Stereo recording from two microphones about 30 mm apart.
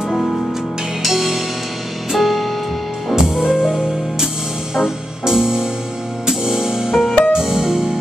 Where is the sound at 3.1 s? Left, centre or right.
Centre.